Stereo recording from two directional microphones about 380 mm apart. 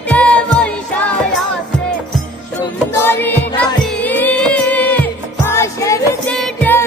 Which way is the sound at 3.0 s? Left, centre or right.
Centre.